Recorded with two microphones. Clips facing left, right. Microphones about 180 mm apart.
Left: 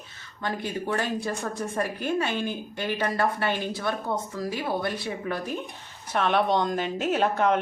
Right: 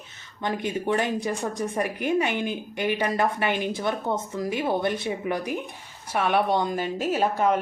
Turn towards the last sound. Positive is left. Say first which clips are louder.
# even
turn(degrees=-5)  # may be behind; listen again after turning